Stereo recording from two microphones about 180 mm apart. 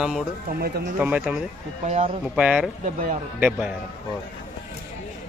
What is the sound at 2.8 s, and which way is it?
Speech, 45° right (ahead or behind).